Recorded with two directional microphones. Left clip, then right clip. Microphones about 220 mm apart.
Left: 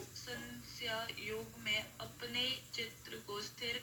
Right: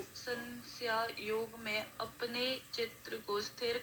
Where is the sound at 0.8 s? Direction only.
15° right (ahead or behind).